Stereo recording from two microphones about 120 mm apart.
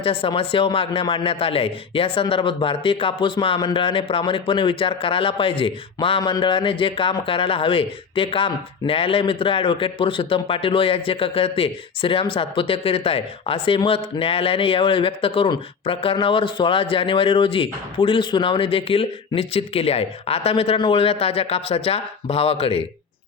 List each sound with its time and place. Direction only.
0.0 s speech: 50° left (ahead or behind)